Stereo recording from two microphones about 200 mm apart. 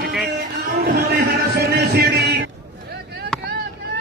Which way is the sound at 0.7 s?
50° right (ahead or behind).